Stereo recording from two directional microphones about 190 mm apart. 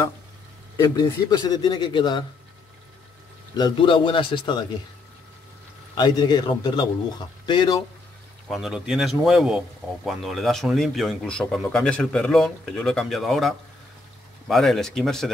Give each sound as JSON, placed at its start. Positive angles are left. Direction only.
{"t": 0.7, "sound": "a man's voice", "side_deg": 20}
{"t": 3.5, "sound": "a man's voice", "side_deg": 25}
{"t": 5.9, "sound": "a man's voice", "side_deg": 20}
{"t": 8.5, "sound": "a man's voice", "side_deg": 0}